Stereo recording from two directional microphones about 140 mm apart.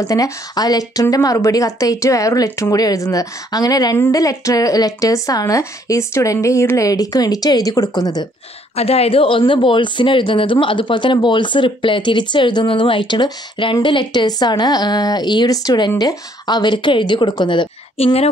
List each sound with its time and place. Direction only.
0.0 s speech: 25° left (ahead or behind)
8.7 s a woman's voice: 45° left (ahead or behind)
17.9 s a woman's voice: 45° left (ahead or behind)